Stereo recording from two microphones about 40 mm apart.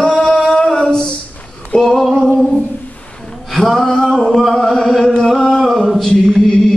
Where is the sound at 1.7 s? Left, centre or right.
Left.